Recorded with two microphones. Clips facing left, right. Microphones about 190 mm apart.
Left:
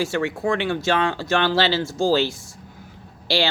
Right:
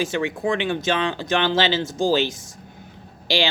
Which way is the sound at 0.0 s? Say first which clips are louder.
Even; 20° right (ahead or behind).